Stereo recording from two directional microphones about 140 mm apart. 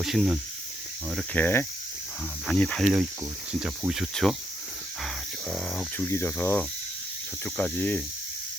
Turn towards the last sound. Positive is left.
turn(degrees=10)  # may be behind; listen again after turning